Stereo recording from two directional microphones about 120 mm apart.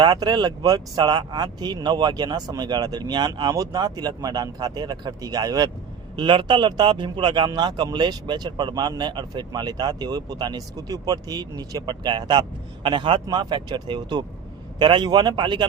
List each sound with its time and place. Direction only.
0.0 s a man's voice: 35° right (ahead or behind)